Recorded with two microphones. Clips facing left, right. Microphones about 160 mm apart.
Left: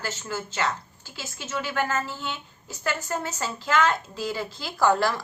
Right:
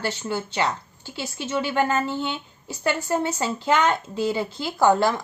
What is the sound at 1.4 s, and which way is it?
Speech, 30° right (ahead or behind).